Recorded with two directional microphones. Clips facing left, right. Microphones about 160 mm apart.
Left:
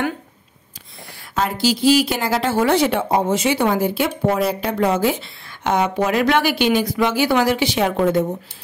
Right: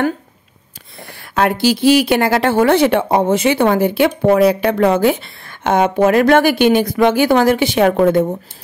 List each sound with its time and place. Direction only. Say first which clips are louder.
1.3 s a woman's voice: right 5 dB; 65° right (ahead or behind)